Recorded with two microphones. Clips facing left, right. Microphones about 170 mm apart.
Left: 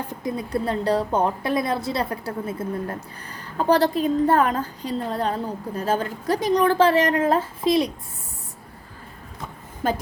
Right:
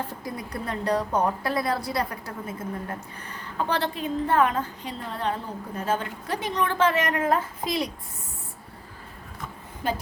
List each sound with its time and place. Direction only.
0.1 s a woman's voice: 20° left (ahead or behind)